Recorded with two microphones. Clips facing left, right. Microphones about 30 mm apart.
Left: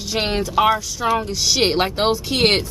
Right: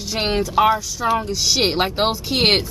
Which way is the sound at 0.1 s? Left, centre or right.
Centre.